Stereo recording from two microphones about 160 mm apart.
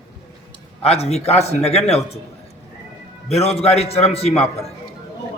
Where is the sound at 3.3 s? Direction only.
40° left (ahead or behind).